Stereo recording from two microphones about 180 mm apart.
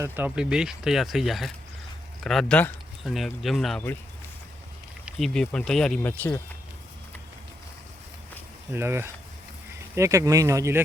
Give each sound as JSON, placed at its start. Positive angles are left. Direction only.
{"t": 0.0, "sound": "speech", "side_deg": -10}
{"t": 5.1, "sound": "speech", "side_deg": 5}
{"t": 8.7, "sound": "speech", "side_deg": -15}